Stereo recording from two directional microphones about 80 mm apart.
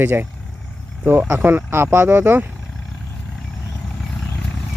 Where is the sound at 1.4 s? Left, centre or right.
Right.